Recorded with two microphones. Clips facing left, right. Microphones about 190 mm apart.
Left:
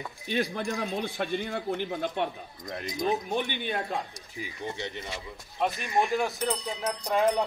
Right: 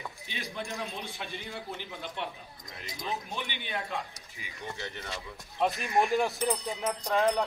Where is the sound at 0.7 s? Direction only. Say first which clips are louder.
Left 7 dB; 55° left (ahead or behind).